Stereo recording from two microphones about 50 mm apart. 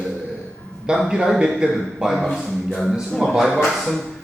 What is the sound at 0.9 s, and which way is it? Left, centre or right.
Speech, centre.